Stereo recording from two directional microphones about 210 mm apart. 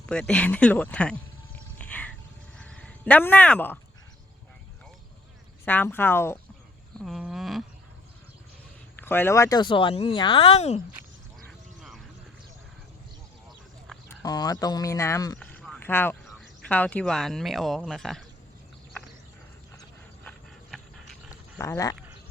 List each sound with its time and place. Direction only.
0.0 s speech: 5° left (ahead or behind)
1.5 s wild animals: 5° left (ahead or behind)
2.6 s sheep: 5° left (ahead or behind)
5.6 s speech: 10° left (ahead or behind)
7.0 s a sound: centre (ahead or behind)
9.0 s speech: 10° left (ahead or behind); by 10.8 s 30° left (ahead or behind)
11.4 s a sound: centre (ahead or behind)
13.8 s a sound: centre (ahead or behind)
14.2 s speech: 20° left (ahead or behind)
15.4 s a sound: 5° left (ahead or behind)
16.4 s speech: 5° left (ahead or behind)
20.2 s dog: centre (ahead or behind)
21.6 s speech: 15° left (ahead or behind)